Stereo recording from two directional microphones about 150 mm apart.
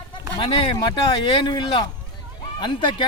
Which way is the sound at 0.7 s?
30° left (ahead or behind).